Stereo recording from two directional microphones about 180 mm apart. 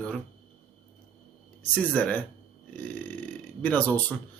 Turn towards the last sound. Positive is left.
turn(degrees=10)  # may be behind; listen again after turning